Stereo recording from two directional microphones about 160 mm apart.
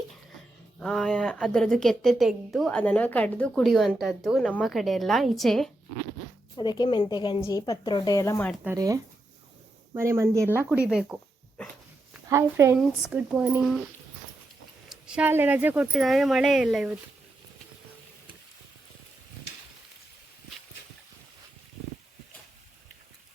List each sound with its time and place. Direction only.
0.8 s a woman's voice: 5° left (ahead or behind)
6.6 s speech: 25° left (ahead or behind)
8.6 s speech: 20° right (ahead or behind)
10.7 s a woman's voice: 5° right (ahead or behind)
12.3 s speech: 15° right (ahead or behind)
12.7 s a woman's voice: 5° right (ahead or behind)
14.8 s a woman's voice: 5° right (ahead or behind)